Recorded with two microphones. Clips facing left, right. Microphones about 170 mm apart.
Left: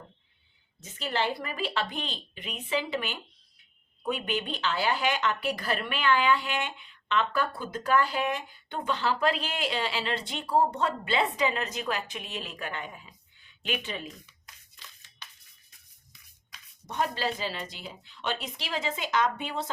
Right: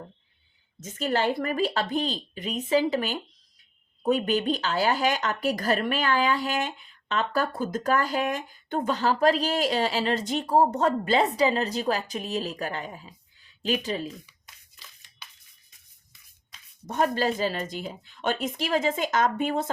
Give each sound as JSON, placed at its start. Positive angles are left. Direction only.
{"t": 0.8, "sound": "speech", "side_deg": -45}
{"t": 14.3, "sound": "a sound", "side_deg": -10}
{"t": 16.8, "sound": "speech", "side_deg": -45}